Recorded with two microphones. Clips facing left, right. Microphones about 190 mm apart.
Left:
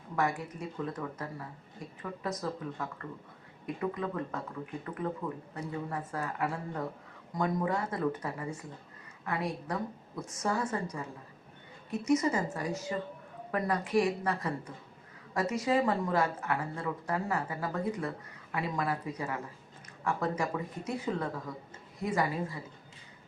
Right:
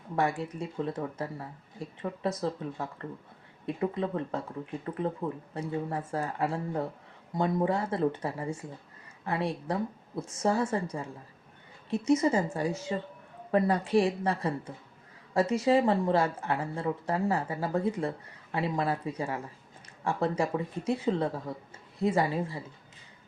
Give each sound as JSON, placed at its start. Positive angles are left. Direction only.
{"t": 0.2, "sound": "speech", "side_deg": -30}